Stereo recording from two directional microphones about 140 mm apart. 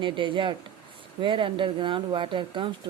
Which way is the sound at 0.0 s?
35° right (ahead or behind).